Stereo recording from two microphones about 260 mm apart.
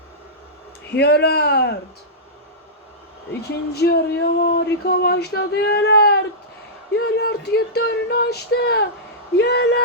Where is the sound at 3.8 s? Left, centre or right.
Left.